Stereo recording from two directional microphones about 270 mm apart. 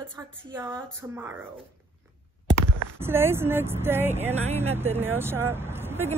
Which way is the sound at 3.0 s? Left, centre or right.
Centre.